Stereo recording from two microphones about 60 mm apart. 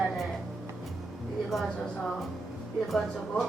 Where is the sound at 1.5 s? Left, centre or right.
Centre.